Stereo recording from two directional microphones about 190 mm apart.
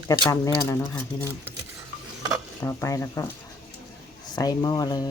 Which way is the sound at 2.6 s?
15° left (ahead or behind).